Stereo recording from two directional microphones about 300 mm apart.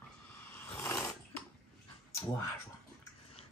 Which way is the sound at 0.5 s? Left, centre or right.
Centre.